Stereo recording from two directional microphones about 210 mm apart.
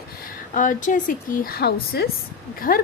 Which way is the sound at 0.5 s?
40° left (ahead or behind).